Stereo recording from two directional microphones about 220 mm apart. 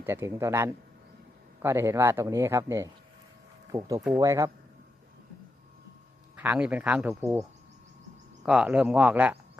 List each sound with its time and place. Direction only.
0.0 s speech: 10° right (ahead or behind)
6.3 s speech: 10° right (ahead or behind)
8.4 s speech: 5° right (ahead or behind)